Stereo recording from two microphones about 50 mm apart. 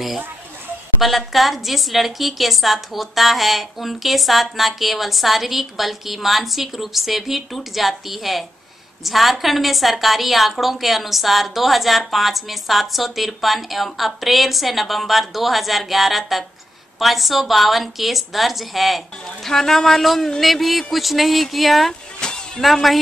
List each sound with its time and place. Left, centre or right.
1.0 s a woman's voice: centre
22.2 s a sound: centre
22.6 s a woman's voice: centre